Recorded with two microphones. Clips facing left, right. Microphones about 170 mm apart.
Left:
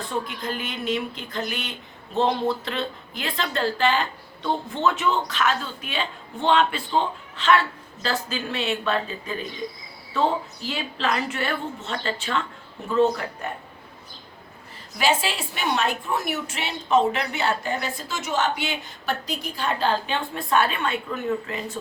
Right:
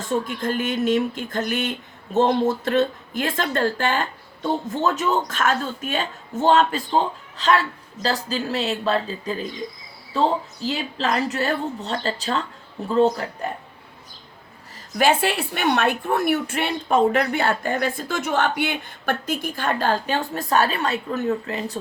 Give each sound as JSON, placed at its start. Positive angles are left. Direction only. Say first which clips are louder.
{"t": 0.1, "sound": "a woman's voice", "louder": "right 7 dB", "side_deg": -45}
{"t": 14.9, "sound": "a woman's voice", "louder": "right 4 dB", "side_deg": -55}